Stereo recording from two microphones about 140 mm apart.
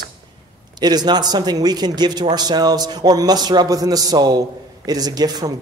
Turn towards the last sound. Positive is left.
turn(degrees=-30)  # may be behind; listen again after turning